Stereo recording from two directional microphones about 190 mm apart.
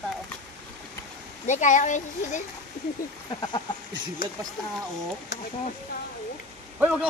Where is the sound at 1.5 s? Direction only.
40° left (ahead or behind).